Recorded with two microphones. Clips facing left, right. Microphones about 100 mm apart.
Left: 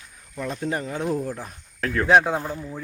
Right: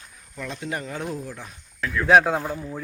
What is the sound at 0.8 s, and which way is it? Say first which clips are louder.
Speech: left 4 dB; 25° left (ahead or behind).